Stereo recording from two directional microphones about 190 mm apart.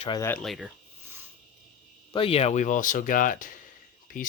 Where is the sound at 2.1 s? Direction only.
30° left (ahead or behind).